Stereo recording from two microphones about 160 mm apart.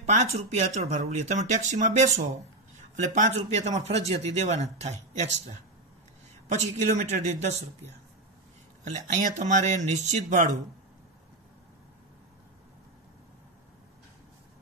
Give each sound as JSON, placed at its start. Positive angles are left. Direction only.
{"t": 0.0, "sound": "speech", "side_deg": -45}
{"t": 6.5, "sound": "speech", "side_deg": -45}